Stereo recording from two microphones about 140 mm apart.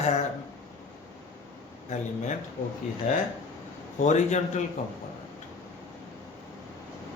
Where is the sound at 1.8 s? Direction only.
60° left (ahead or behind).